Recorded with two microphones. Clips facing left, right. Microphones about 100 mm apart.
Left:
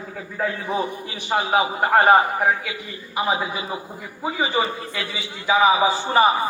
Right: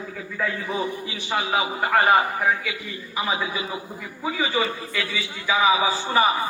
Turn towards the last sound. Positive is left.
turn(degrees=30)  # may be behind; listen again after turning